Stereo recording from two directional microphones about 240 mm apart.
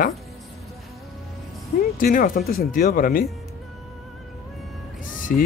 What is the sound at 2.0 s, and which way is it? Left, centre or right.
Speech, left.